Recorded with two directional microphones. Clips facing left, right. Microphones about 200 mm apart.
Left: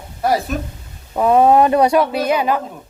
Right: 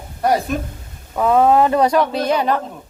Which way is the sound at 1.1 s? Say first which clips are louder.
Left 2 dB; 15° left (ahead or behind).